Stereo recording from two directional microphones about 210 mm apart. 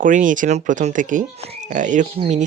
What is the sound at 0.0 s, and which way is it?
Speech, 40° right (ahead or behind).